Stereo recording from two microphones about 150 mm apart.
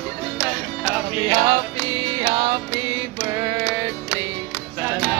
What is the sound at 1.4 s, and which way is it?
Music, 25° right (ahead or behind).